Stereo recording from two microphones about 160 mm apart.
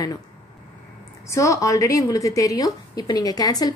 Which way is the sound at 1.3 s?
20° left (ahead or behind).